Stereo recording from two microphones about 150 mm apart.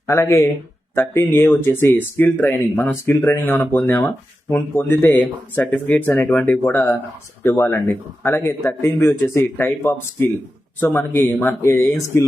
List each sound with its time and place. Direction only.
0.1 s speech: 15° left (ahead or behind)